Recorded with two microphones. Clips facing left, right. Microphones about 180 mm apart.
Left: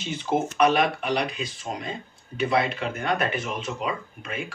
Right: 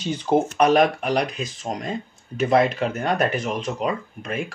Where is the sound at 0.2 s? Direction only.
40° right (ahead or behind).